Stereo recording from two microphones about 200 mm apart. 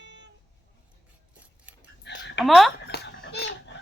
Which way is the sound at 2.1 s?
60° left (ahead or behind).